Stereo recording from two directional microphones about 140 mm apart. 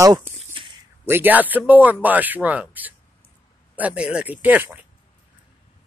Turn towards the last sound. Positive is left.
turn(degrees=-15)  # may be behind; listen again after turning